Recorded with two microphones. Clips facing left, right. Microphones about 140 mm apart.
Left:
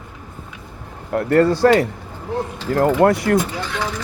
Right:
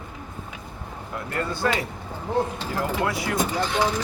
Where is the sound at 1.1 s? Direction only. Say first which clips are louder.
Left 14 dB; 65° left (ahead or behind).